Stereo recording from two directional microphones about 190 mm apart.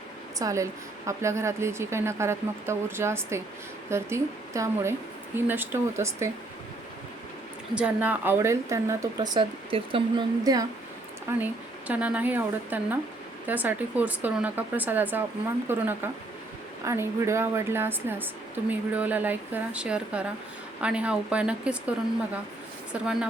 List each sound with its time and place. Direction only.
0.3 s a woman's voice: 15° right (ahead or behind)
7.8 s a woman's voice: 5° right (ahead or behind)